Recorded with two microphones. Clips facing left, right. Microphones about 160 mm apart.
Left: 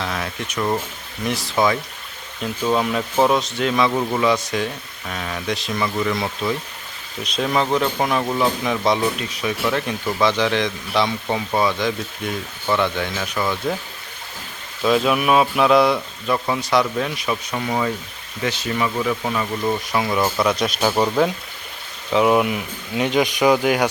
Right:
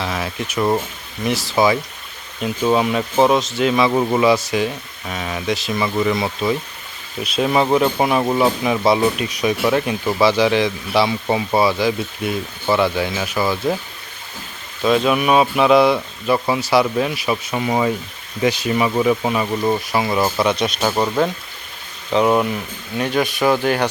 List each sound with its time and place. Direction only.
0.0 s speech: 5° right (ahead or behind)
3.9 s speech: 20° right (ahead or behind)
4.3 s speech: 5° right (ahead or behind)
8.2 s speech: 20° right (ahead or behind)
8.6 s speech: 10° right (ahead or behind)
14.8 s speech: centre (ahead or behind); by 19.8 s 20° right (ahead or behind)
19.9 s speech: 5° right (ahead or behind)
23.0 s speech: 20° left (ahead or behind)